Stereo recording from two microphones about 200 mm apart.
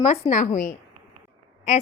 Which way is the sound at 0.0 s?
35° left (ahead or behind).